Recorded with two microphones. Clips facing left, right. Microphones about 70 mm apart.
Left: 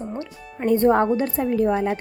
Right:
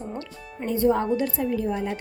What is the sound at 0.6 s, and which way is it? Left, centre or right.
Speech, left.